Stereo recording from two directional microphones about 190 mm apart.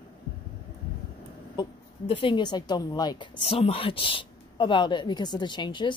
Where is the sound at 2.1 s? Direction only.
25° left (ahead or behind).